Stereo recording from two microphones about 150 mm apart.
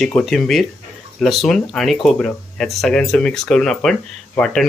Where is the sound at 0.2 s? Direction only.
Centre (ahead or behind).